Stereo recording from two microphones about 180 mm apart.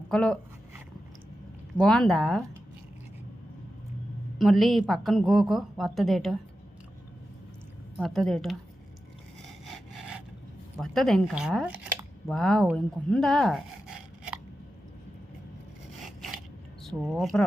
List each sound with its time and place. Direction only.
0.1 s speech: 5° left (ahead or behind)
1.8 s a woman's voice: 5° left (ahead or behind)
4.4 s a woman's voice: centre (ahead or behind)
7.9 s a woman's voice: centre (ahead or behind)
10.8 s a woman's voice: centre (ahead or behind)
16.8 s speech: centre (ahead or behind)